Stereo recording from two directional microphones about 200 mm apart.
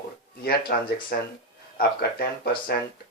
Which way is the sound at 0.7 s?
50° left (ahead or behind).